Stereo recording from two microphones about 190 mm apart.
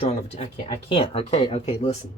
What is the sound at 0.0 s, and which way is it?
Speech, 35° left (ahead or behind).